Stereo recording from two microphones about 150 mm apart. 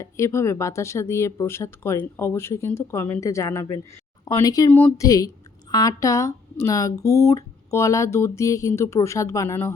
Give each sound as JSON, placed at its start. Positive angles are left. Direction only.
{"t": 0.0, "sound": "speech", "side_deg": 20}
{"t": 4.7, "sound": "speech", "side_deg": 10}
{"t": 5.0, "sound": "speech", "side_deg": 25}